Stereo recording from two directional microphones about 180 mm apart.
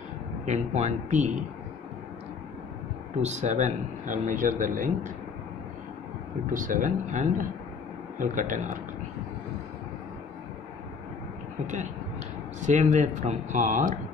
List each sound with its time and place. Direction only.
0.5 s speech: 40° right (ahead or behind)
3.2 s a man's voice: 40° right (ahead or behind)
6.5 s a man's voice: 45° right (ahead or behind)
11.6 s a man's voice: 40° right (ahead or behind)